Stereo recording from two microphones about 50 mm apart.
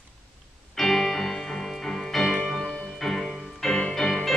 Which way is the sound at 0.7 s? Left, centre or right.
Centre.